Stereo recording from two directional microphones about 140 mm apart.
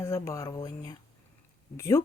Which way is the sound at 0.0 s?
25° left (ahead or behind).